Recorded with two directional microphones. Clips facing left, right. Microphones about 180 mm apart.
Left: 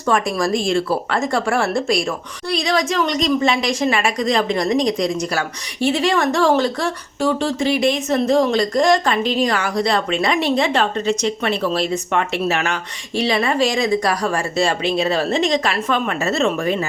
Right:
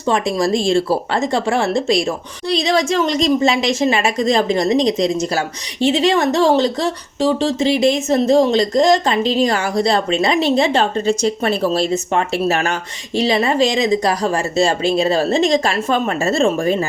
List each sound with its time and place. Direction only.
0.0 s speech: 25° right (ahead or behind)
13.1 s speech: 25° right (ahead or behind)